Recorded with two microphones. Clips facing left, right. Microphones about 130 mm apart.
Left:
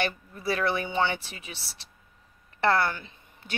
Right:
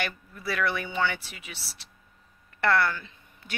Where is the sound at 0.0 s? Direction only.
30° left (ahead or behind).